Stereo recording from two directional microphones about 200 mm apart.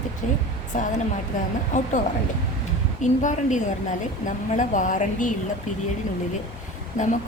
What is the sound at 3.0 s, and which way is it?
A woman's voice, 35° left (ahead or behind).